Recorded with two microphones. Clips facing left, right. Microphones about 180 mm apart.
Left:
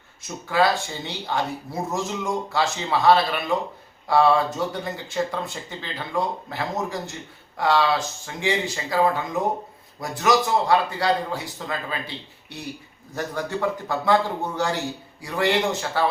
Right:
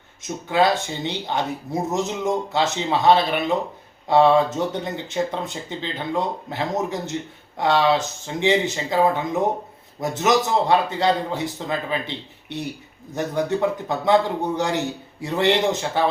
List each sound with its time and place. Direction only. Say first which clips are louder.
0.2 s a man's voice: right 2 dB; 20° right (ahead or behind)